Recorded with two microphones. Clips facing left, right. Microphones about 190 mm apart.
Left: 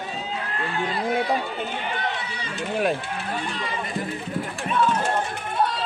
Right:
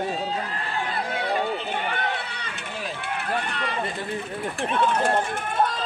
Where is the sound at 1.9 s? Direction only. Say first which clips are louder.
Even; 60° right (ahead or behind).